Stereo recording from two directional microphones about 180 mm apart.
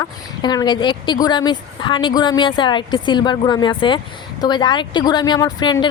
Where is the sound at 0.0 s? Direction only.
20° left (ahead or behind).